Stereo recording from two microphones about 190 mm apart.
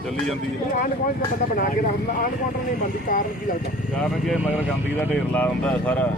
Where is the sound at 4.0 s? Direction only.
Centre (ahead or behind).